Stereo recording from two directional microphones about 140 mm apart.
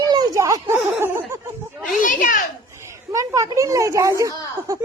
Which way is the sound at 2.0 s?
70° left (ahead or behind).